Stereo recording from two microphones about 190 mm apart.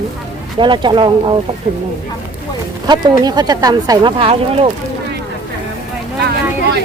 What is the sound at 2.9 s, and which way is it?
Speech, 20° right (ahead or behind).